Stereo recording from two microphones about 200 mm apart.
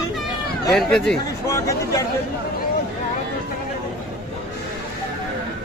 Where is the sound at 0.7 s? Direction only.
5° left (ahead or behind).